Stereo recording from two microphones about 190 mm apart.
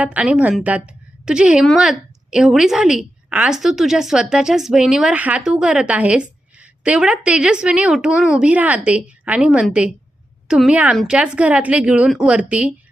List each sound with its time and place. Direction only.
0.0 s a woman's voice: 5° right (ahead or behind)